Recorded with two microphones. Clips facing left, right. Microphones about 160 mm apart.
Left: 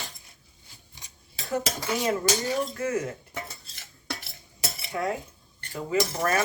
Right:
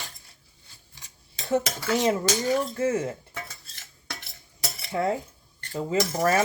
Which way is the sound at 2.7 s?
25° right (ahead or behind).